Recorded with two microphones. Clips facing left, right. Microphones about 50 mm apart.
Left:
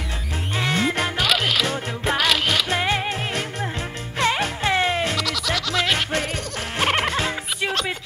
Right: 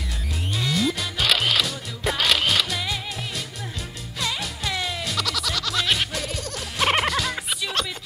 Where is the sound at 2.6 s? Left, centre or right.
Left.